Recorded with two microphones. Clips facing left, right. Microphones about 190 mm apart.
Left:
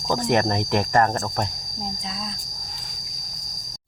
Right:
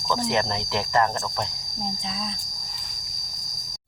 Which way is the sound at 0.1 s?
50° left (ahead or behind).